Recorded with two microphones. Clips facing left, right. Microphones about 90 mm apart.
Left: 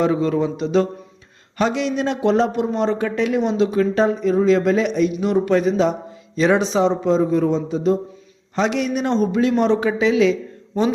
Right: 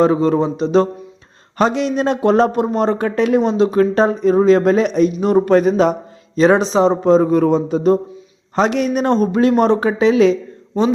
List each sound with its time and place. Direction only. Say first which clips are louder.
0.0 s speech: right 4 dB; 35° right (ahead or behind)
7.3 s a man's voice: right 4 dB; 60° right (ahead or behind); by 10.3 s 40° right (ahead or behind)